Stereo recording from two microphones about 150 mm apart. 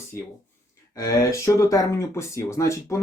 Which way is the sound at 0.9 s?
20° left (ahead or behind).